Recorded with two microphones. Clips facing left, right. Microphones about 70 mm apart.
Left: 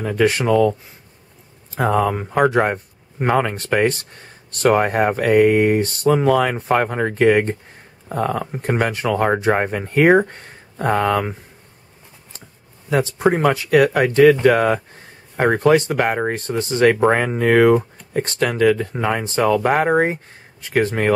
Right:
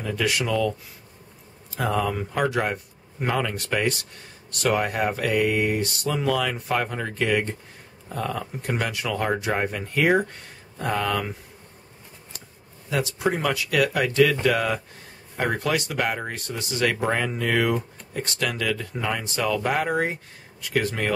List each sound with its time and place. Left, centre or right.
0.0 s speech: left
12.9 s speech: left